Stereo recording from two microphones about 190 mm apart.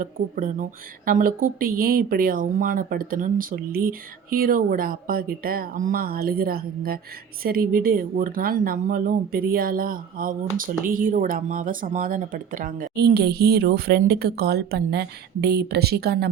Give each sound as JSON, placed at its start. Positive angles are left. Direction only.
{"t": 0.0, "sound": "speech", "side_deg": -45}